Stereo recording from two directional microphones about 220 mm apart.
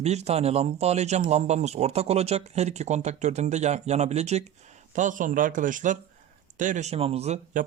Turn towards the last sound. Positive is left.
turn(degrees=-35)  # may be behind; listen again after turning